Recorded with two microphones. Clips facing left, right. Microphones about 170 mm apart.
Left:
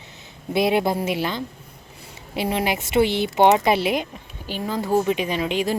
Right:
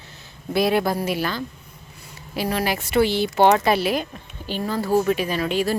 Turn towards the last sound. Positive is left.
turn(degrees=20)  # may be behind; listen again after turning